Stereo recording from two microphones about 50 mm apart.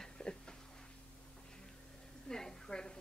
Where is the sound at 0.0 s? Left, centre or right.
Centre.